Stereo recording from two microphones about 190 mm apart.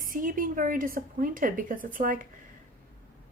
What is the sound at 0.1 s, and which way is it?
Speech, 45° right (ahead or behind).